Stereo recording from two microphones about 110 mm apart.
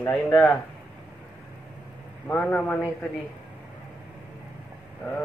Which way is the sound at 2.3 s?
15° left (ahead or behind).